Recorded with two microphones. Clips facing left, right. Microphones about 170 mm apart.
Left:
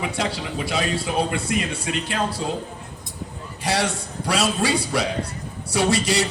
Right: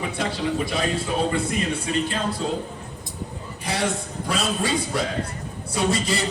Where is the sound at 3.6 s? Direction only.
75° left (ahead or behind).